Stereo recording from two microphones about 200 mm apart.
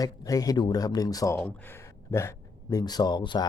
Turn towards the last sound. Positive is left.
turn(degrees=20)  # may be behind; listen again after turning